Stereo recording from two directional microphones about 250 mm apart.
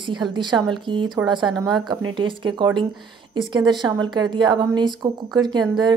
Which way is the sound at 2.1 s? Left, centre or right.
Centre.